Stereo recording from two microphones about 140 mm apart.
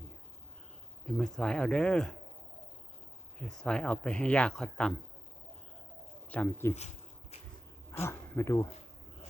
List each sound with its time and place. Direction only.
1.0 s speech: 5° left (ahead or behind)
3.4 s speech: 5° left (ahead or behind)
6.3 s speech: 15° left (ahead or behind)
7.9 s speech: 20° left (ahead or behind)